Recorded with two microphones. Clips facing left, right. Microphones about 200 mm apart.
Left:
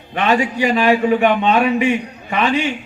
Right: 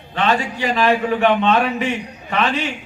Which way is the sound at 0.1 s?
15° left (ahead or behind).